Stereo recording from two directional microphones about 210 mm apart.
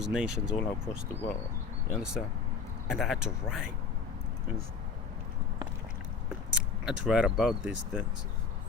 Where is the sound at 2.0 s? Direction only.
5° right (ahead or behind).